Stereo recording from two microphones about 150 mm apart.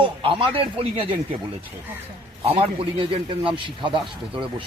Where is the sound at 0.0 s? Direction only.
35° right (ahead or behind).